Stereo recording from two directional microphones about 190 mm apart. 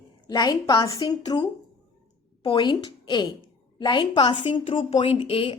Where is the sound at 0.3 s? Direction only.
20° left (ahead or behind).